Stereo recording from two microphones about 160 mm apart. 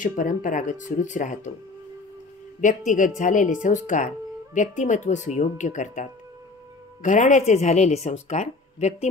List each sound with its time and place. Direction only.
0.0 s speech: 55° left (ahead or behind)
2.6 s speech: 50° left (ahead or behind)